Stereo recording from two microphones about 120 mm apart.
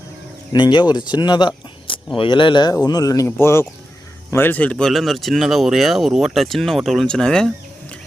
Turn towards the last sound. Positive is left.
turn(degrees=5)  # may be behind; listen again after turning